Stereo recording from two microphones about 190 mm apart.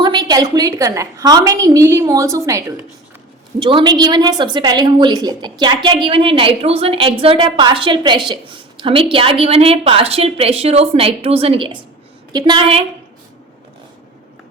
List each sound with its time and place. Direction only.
0.0 s a woman's voice: 20° right (ahead or behind)
3.6 s a woman's voice: 25° right (ahead or behind)